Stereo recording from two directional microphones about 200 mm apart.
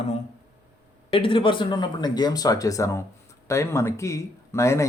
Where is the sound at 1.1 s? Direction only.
25° left (ahead or behind).